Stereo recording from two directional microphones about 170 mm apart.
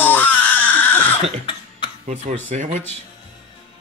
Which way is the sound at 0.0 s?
10° left (ahead or behind).